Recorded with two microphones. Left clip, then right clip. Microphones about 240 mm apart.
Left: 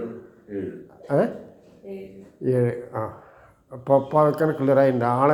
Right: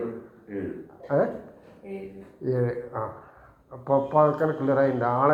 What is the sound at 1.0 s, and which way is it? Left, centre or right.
Speech, left.